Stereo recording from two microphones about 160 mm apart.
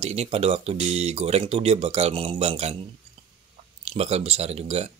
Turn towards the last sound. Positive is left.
turn(degrees=-40)  # may be behind; listen again after turning